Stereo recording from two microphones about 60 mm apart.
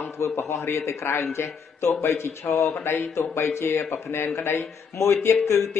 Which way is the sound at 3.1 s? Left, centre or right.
Left.